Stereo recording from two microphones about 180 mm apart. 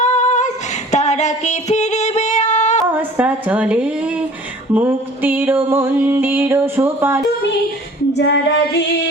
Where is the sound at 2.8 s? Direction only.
10° right (ahead or behind).